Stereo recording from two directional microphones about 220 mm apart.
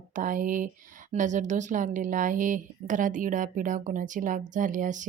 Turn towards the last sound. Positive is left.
turn(degrees=-35)  # may be behind; listen again after turning